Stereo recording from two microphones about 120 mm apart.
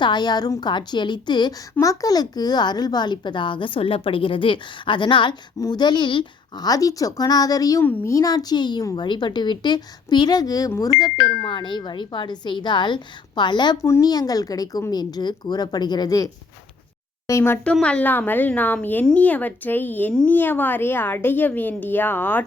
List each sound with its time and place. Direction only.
0.0 s a child's voice: 40° left (ahead or behind)
11.4 s a child's voice: 40° left (ahead or behind)
13.8 s a child's voice: 25° left (ahead or behind)